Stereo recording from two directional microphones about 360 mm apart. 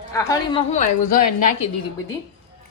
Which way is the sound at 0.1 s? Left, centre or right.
Centre.